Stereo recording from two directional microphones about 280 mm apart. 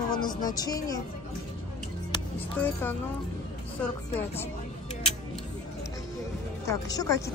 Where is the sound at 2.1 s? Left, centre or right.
Centre.